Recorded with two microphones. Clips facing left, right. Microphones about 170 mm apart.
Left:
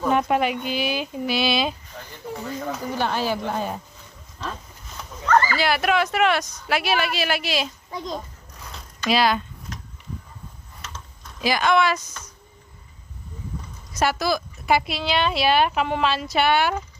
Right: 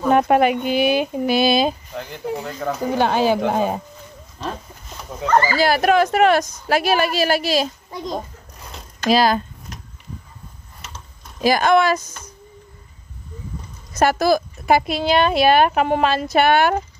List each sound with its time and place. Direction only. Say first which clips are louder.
0.1 s speech: right 7 dB; 55° right (ahead or behind)
2.0 s speech: right 7 dB; 80° right
5.5 s speech: right 5 dB; 40° right (ahead or behind)
11.4 s speech: right 4 dB; 45° right (ahead or behind)
13.9 s speech: right 6 dB; 50° right (ahead or behind)